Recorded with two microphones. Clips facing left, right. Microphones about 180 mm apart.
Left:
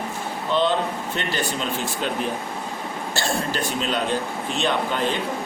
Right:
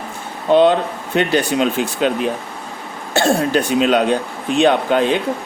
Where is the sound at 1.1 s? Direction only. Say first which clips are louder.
Right 14 dB; 70° right (ahead or behind).